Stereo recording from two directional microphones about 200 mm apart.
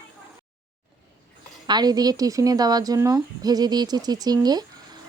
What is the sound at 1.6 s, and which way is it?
Speech, 20° right (ahead or behind).